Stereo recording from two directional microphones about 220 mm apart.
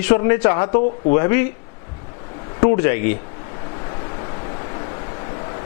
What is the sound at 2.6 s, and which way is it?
Speech, 15° left (ahead or behind).